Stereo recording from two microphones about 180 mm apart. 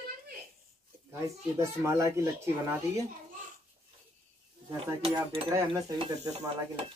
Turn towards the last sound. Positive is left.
turn(degrees=-30)  # may be behind; listen again after turning